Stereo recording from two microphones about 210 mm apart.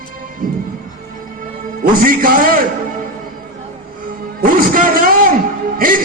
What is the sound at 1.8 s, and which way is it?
Speech, 45° right (ahead or behind).